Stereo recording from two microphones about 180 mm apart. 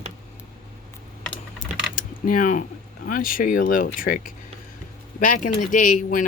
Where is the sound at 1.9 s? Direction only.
45° left (ahead or behind).